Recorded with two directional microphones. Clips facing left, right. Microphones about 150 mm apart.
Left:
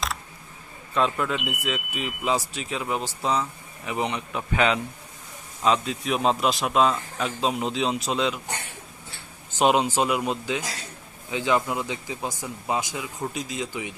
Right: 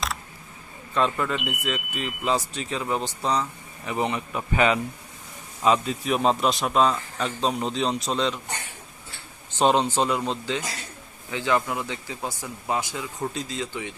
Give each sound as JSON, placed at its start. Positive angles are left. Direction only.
{"t": 0.9, "sound": "a man's voice", "side_deg": 0}
{"t": 9.6, "sound": "speech", "side_deg": 10}